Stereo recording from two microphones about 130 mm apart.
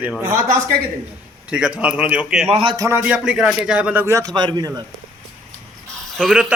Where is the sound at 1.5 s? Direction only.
5° right (ahead or behind).